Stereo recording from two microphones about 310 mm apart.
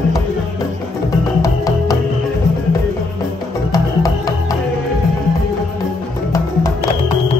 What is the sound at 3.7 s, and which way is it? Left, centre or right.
Music, centre.